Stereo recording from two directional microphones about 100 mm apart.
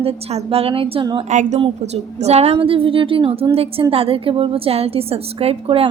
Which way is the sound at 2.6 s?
65° right (ahead or behind).